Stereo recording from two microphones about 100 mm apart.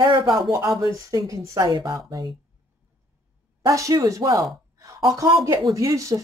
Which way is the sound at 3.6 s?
35° right (ahead or behind).